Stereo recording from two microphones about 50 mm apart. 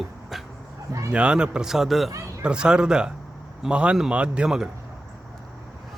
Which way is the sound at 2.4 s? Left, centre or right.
Centre.